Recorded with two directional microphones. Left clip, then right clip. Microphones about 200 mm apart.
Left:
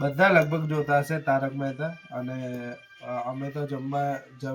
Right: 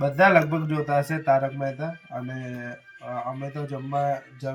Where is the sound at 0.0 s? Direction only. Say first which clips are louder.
Right 2 dB; 15° right (ahead or behind).